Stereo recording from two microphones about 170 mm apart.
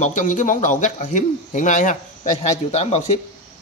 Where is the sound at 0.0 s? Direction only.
45° left (ahead or behind).